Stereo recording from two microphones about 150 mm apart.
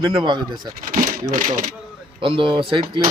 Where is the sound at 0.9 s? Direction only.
70° right (ahead or behind).